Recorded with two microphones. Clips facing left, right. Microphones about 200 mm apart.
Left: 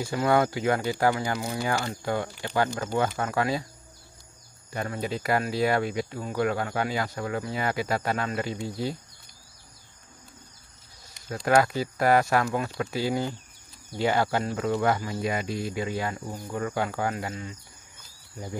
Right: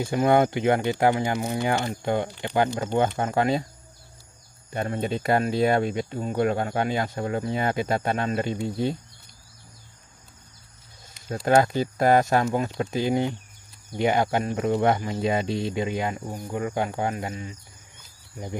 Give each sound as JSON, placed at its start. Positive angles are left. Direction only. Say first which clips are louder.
{"t": 0.0, "sound": "speech", "louder": "right 3 dB", "side_deg": -20}
{"t": 4.7, "sound": "speech", "louder": "right 4 dB", "side_deg": -25}
{"t": 11.2, "sound": "speech", "louder": "right 2 dB", "side_deg": -30}